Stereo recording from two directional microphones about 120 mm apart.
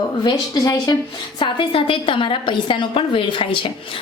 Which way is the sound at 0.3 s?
35° left (ahead or behind).